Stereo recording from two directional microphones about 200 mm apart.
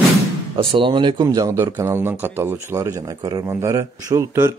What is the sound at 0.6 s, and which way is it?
Speech, 25° right (ahead or behind).